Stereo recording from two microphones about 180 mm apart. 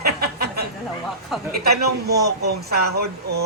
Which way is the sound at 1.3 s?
5° right (ahead or behind).